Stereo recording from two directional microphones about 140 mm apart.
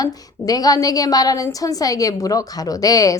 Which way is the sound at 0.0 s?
25° left (ahead or behind).